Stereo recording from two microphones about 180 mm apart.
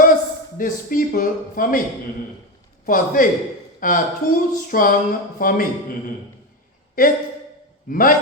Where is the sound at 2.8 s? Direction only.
50° left (ahead or behind).